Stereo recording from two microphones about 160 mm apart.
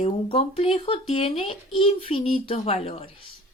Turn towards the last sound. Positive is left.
turn(degrees=40)  # may be behind; listen again after turning